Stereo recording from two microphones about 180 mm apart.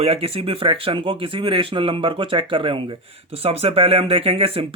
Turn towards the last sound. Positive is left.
turn(degrees=-30)  # may be behind; listen again after turning